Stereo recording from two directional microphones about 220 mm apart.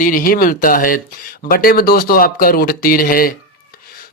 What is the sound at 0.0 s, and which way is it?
Speech, 40° left (ahead or behind).